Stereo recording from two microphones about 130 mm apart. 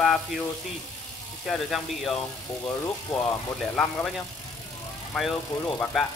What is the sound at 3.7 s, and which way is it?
Speech, 5° left (ahead or behind).